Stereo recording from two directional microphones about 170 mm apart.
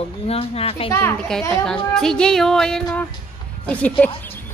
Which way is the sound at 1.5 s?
5° left (ahead or behind).